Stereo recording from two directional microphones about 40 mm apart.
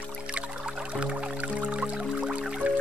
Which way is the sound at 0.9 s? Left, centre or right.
Right.